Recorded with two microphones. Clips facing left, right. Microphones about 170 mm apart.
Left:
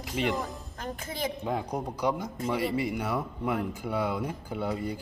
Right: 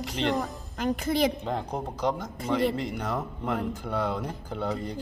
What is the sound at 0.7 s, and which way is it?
Speech, 80° right.